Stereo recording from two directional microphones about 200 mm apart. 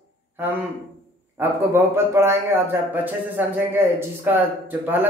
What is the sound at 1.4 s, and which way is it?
A man's voice, 10° right (ahead or behind).